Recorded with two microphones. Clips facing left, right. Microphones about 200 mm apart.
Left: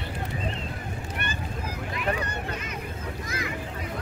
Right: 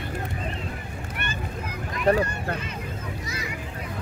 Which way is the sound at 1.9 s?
40° right (ahead or behind).